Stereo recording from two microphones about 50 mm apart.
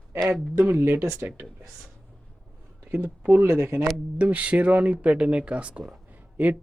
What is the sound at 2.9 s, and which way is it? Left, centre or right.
Speech, right.